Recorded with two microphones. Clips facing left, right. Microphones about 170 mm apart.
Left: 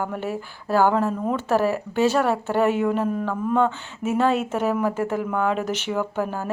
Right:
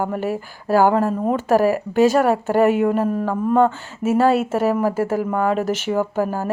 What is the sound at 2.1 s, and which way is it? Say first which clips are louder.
Speech: right 5 dB; 45° right (ahead or behind).